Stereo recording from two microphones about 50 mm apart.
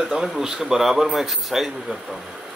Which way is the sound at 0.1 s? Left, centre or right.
Centre.